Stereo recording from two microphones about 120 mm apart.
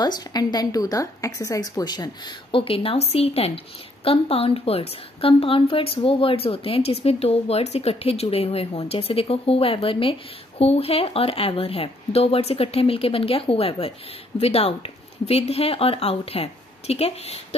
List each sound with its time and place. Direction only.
0.0 s a woman's voice: 35° left (ahead or behind); by 17.6 s 60° left (ahead or behind)